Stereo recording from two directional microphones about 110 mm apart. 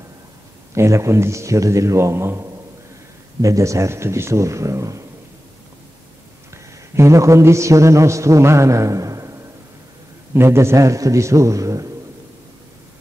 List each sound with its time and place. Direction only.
0.7 s a man's voice: 25° right (ahead or behind)
7.0 s a man's voice: 30° right (ahead or behind)